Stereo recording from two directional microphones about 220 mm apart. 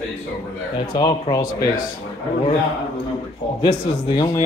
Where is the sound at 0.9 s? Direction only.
20° left (ahead or behind).